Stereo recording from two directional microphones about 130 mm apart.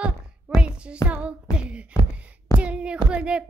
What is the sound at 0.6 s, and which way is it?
Music, 10° right (ahead or behind).